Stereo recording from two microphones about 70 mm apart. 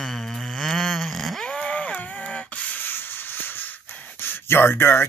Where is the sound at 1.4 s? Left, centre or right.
Centre.